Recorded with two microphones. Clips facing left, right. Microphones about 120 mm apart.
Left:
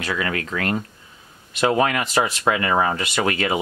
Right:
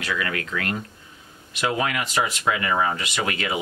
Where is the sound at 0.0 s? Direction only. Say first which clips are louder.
Left 2 dB; 35° left (ahead or behind).